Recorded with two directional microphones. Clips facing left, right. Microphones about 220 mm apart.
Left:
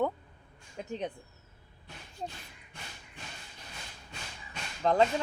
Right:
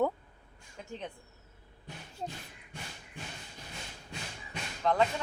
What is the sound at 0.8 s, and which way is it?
Speech, 20° left (ahead or behind).